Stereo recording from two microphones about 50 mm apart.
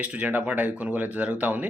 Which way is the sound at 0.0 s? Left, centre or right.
Right.